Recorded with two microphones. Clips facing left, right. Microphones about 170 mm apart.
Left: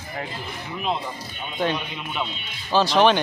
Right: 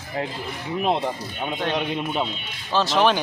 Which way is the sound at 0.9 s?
75° right (ahead or behind).